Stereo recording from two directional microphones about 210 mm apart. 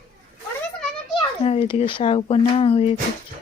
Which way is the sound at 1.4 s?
30° left (ahead or behind).